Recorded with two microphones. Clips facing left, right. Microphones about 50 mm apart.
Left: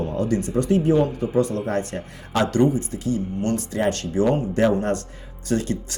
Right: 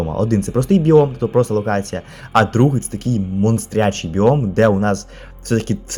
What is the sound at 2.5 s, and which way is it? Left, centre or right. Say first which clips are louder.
Speech: right 3 dB; right.